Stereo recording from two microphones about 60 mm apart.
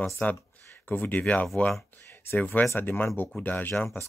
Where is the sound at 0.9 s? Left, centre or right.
Left.